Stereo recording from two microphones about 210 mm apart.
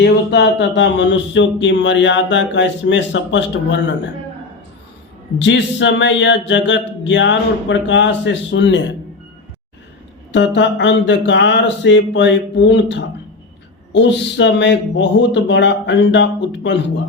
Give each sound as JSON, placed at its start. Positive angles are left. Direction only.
{"t": 0.0, "sound": "speech", "side_deg": 55}
{"t": 5.4, "sound": "speech", "side_deg": 60}
{"t": 10.3, "sound": "speech", "side_deg": 60}